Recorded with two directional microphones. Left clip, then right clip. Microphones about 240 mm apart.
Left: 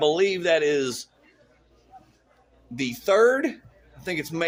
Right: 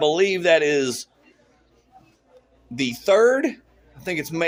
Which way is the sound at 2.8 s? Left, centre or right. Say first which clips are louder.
Right 3 dB; right.